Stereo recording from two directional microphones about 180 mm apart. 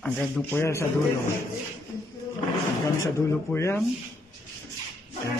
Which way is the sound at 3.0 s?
15° left (ahead or behind).